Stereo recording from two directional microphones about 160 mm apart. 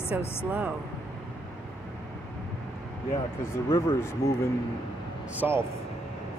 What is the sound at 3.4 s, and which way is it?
Speech, 15° left (ahead or behind).